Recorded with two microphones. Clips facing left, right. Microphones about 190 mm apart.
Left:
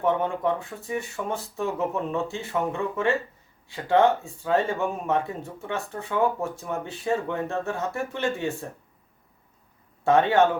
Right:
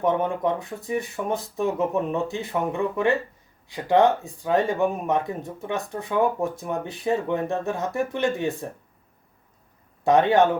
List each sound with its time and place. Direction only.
0.0 s speech: 15° right (ahead or behind)
10.0 s speech: 15° right (ahead or behind)